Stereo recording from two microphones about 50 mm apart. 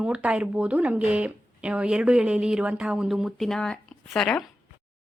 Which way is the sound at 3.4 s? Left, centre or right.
Centre.